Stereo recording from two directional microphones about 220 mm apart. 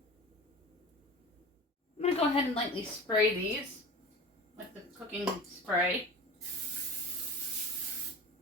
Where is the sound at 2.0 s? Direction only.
25° left (ahead or behind).